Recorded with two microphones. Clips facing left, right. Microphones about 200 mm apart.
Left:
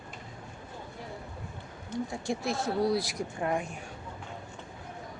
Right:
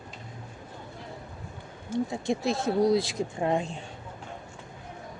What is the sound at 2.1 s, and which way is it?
Speech, 20° right (ahead or behind).